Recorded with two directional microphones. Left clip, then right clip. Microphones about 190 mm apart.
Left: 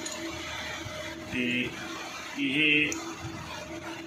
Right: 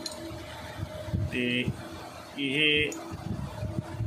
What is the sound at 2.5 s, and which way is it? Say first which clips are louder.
Speech: even; 50° right (ahead or behind).